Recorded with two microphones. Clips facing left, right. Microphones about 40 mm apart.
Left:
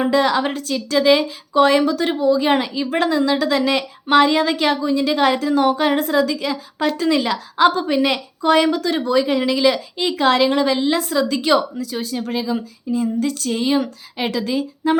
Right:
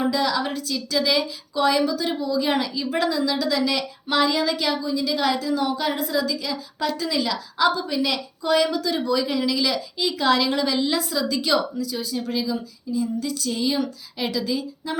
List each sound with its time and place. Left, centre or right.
0.1 s a woman's voice: left
13.5 s a woman's voice: left